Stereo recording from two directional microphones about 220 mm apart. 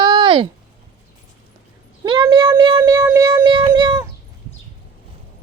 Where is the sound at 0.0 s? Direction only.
25° right (ahead or behind).